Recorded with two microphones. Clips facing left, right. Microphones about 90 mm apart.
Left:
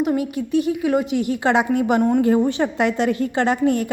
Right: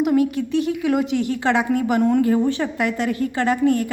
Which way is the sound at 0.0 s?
5° left (ahead or behind).